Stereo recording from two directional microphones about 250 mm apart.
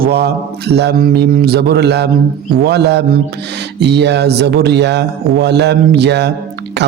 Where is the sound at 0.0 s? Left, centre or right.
Right.